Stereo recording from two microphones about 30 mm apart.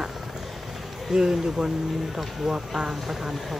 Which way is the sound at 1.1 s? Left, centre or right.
Right.